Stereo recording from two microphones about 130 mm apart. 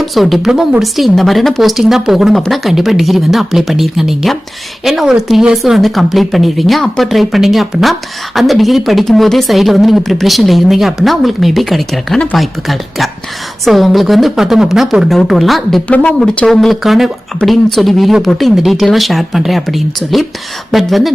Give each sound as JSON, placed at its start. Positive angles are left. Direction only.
{"t": 0.0, "sound": "a woman's voice", "side_deg": 0}